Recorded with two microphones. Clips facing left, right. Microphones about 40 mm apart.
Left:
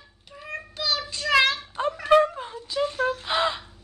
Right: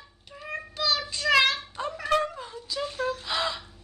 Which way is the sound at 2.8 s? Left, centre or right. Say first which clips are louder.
Left 5 dB; centre.